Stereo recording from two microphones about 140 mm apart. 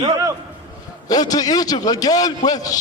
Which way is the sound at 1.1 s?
25° left (ahead or behind).